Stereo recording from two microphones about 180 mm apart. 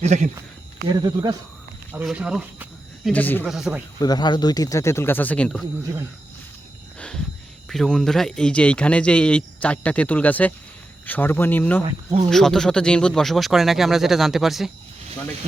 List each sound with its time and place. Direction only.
0.0 s speech: 40° right (ahead or behind)
0.9 s speech: 25° right (ahead or behind)
2.0 s speech: 5° right (ahead or behind)
3.2 s speech: 10° left (ahead or behind)
3.4 s speech: centre (ahead or behind)
4.0 s speech: 25° left (ahead or behind); by 5.6 s 5° left (ahead or behind)
7.7 s speech: 5° left (ahead or behind)